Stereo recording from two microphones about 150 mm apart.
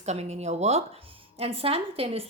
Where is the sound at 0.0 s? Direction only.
45° right (ahead or behind).